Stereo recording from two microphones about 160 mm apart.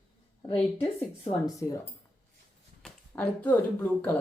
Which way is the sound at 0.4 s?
35° left (ahead or behind).